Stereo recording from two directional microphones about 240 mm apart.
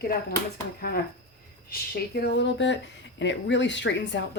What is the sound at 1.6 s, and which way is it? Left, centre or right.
Speech, left.